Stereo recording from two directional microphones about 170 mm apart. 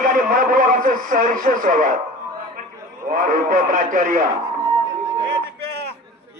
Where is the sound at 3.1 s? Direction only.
55° right (ahead or behind).